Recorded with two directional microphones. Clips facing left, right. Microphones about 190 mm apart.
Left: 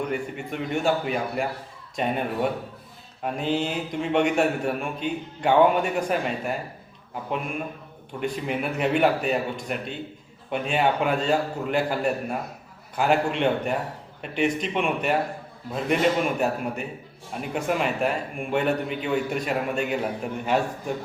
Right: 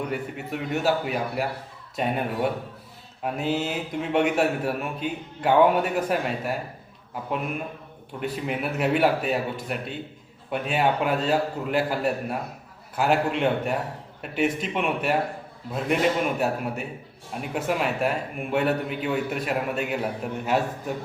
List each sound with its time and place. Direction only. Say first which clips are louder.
0.1 s a man's voice: left 1 dB; 5° right (ahead or behind)